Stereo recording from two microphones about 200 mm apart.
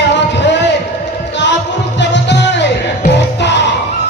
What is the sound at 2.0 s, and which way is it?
Music, 60° left (ahead or behind).